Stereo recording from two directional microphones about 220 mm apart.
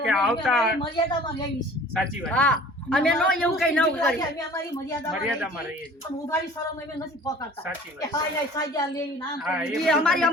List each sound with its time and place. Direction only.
0.0 s a sound: centre (ahead or behind)
0.4 s a man's voice: centre (ahead or behind)
0.8 s a woman's voice: 20° left (ahead or behind)
2.2 s a man's voice: 5° left (ahead or behind)
4.2 s a woman's voice: 15° left (ahead or behind)
8.0 s a woman's voice: 15° left (ahead or behind)
9.4 s a man's voice: centre (ahead or behind)